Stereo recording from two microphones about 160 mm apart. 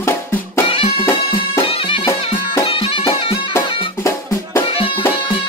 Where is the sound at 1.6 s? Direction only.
35° left (ahead or behind).